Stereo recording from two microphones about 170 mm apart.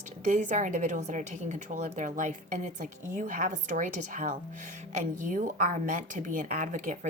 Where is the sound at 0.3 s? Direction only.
45° right (ahead or behind).